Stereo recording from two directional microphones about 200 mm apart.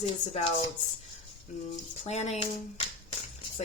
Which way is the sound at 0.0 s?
30° left (ahead or behind).